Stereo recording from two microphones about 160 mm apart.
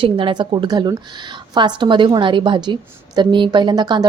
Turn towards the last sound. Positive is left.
turn(degrees=-25)  # may be behind; listen again after turning